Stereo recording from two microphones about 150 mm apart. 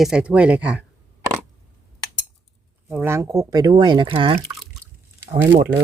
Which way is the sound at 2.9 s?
15° right (ahead or behind).